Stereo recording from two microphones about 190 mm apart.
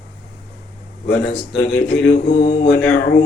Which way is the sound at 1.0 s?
65° left (ahead or behind).